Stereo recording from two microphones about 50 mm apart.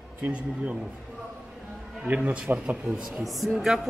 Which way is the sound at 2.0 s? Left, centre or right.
Right.